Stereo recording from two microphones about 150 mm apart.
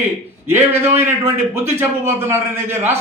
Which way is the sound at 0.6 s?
15° right (ahead or behind).